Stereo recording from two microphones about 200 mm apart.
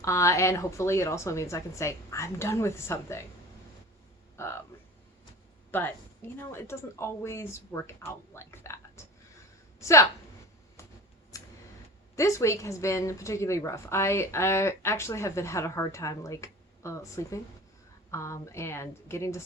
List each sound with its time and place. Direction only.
0.0 s a woman's voice: 15° left (ahead or behind)
4.4 s speech: 15° left (ahead or behind)
5.7 s a woman's voice: 10° left (ahead or behind)
11.3 s tick-tock: 15° left (ahead or behind)
12.1 s a woman's voice: 15° left (ahead or behind)